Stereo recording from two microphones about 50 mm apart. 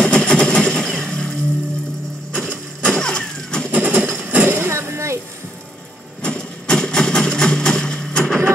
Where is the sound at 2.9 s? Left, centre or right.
Centre.